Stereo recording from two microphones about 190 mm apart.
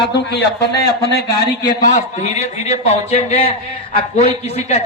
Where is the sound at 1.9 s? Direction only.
35° left (ahead or behind).